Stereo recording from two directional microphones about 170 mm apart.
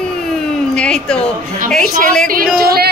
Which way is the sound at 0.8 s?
5° left (ahead or behind).